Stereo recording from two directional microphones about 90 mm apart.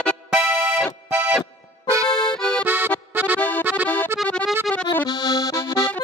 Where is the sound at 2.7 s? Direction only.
20° right (ahead or behind).